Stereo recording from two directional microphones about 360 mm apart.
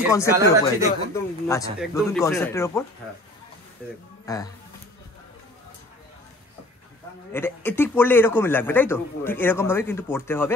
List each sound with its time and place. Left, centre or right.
0.1 s speech: centre
4.3 s speech: centre
7.3 s a man's voice: centre